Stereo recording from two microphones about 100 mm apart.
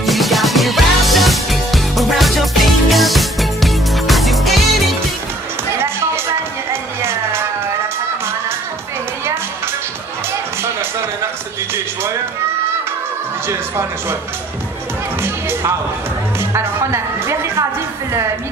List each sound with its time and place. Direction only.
0.0 s music: centre (ahead or behind)
6.7 s music: 25° right (ahead or behind)
16.3 s music: 25° right (ahead or behind)